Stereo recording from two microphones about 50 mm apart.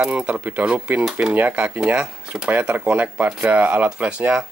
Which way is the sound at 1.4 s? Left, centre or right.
Right.